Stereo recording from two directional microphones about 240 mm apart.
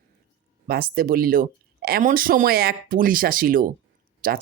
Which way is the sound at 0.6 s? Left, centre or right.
Right.